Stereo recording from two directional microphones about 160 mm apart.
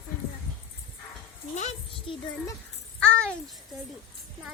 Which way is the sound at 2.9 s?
5° left (ahead or behind).